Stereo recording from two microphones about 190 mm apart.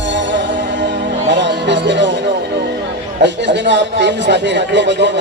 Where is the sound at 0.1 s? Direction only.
70° right (ahead or behind).